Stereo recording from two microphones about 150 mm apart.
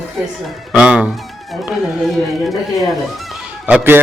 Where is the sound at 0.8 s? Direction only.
5° right (ahead or behind).